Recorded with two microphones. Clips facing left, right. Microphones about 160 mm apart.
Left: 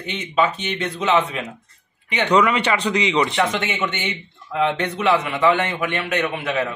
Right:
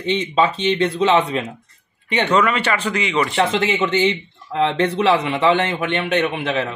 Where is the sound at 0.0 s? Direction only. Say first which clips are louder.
Right 3 dB; 30° right (ahead or behind).